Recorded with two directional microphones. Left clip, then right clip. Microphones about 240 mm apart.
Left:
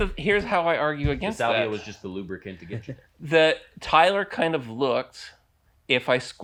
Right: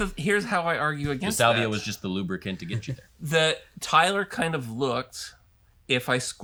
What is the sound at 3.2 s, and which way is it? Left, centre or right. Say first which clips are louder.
Speech: left 4 dB; right.